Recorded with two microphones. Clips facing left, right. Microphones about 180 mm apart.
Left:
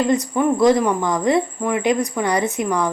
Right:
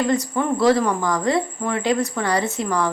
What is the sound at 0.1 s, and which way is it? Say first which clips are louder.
Speech: left 3 dB; 15° left (ahead or behind).